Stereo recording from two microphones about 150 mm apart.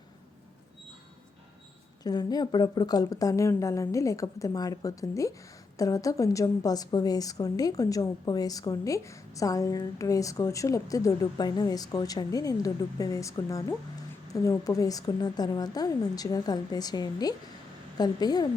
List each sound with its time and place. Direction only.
2.0 s a woman's voice: 25° left (ahead or behind)